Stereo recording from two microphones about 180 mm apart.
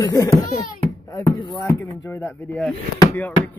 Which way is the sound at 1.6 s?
10° left (ahead or behind).